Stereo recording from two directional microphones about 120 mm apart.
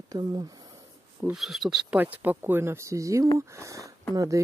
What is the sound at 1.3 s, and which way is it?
Speech, centre (ahead or behind).